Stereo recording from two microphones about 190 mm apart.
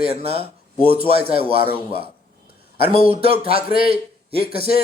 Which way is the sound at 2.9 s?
30° right (ahead or behind).